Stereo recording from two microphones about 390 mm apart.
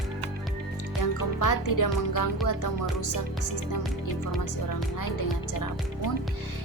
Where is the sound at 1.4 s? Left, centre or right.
Left.